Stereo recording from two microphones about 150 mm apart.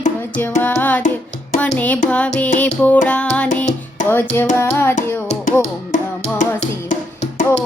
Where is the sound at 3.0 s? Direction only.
10° left (ahead or behind).